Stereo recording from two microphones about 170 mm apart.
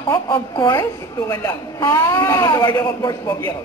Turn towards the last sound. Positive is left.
turn(degrees=20)  # may be behind; listen again after turning